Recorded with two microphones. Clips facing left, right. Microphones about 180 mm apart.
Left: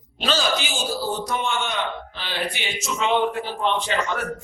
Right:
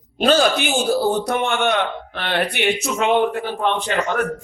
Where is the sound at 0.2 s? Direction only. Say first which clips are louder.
Right 8 dB; 55° right (ahead or behind).